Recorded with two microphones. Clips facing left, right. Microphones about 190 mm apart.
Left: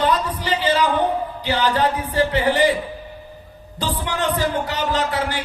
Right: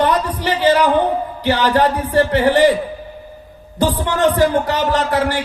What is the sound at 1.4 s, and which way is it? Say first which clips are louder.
Speech: right 5 dB; 65° right (ahead or behind).